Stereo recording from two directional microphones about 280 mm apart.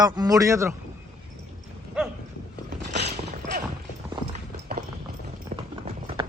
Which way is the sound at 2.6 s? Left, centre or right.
Right.